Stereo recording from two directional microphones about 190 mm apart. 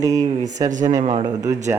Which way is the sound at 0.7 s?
40° right (ahead or behind).